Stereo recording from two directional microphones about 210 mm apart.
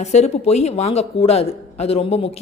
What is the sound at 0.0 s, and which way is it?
Speech, 30° left (ahead or behind).